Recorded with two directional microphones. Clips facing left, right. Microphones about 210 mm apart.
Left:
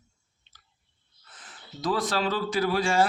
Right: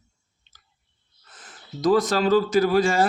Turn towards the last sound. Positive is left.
turn(degrees=-45)  # may be behind; listen again after turning